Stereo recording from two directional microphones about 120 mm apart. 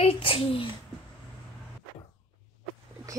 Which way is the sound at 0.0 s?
50° left (ahead or behind).